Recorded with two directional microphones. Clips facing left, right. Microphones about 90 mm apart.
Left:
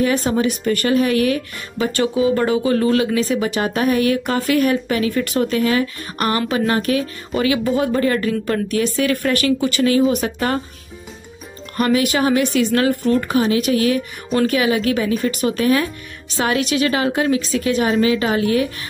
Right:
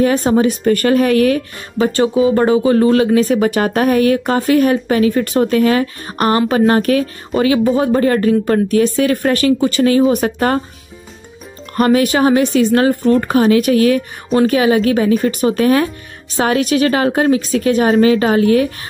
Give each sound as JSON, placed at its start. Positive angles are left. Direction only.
{"t": 0.0, "sound": "speech", "side_deg": -35}
{"t": 11.7, "sound": "speech", "side_deg": -40}